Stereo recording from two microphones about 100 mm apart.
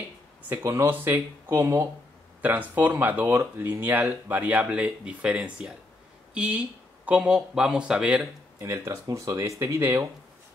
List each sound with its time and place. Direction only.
0.5 s speech: 25° right (ahead or behind)
2.4 s speech: 15° right (ahead or behind)
8.5 s speech: 30° right (ahead or behind)